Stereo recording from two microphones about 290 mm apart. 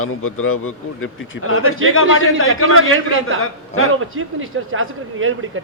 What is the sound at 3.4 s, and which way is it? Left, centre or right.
Speech, left.